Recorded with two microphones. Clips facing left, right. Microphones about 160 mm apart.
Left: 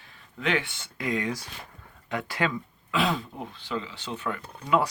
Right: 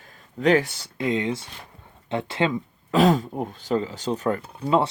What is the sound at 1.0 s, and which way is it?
Speech, 25° right (ahead or behind).